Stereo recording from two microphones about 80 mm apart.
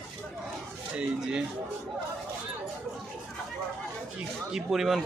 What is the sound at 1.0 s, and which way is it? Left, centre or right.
Speech, centre.